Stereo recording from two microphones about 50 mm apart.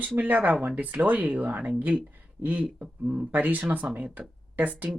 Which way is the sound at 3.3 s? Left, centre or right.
Right.